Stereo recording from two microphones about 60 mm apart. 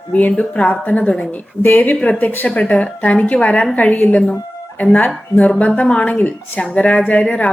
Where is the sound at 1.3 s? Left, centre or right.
Left.